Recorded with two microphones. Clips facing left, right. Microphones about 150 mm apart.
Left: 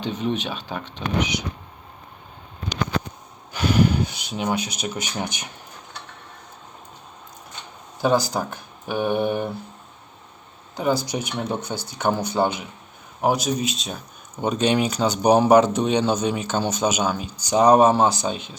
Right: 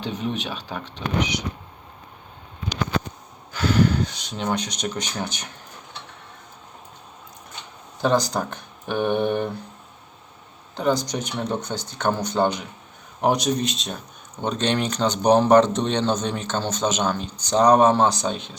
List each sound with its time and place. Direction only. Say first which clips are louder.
0.0 s speech: left 2 dB; centre (ahead or behind)
3.5 s speech: even; 15° left (ahead or behind)
8.0 s speech: left 1 dB; 5° left (ahead or behind)
10.8 s speech: even; 5° left (ahead or behind)